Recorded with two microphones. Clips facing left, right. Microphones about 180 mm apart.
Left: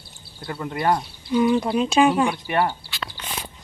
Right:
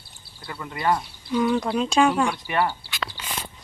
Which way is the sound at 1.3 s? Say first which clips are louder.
Left 3 dB; 10° left (ahead or behind).